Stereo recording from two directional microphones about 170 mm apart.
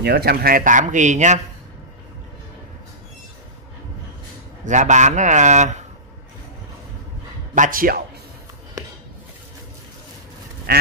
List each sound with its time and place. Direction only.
0.0 s speech: 70° right (ahead or behind); by 1.4 s 45° right (ahead or behind)
4.6 s speech: 45° right (ahead or behind)
7.5 s speech: 50° right (ahead or behind)